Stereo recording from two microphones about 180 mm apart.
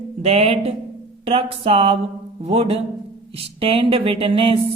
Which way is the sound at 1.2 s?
30° right (ahead or behind).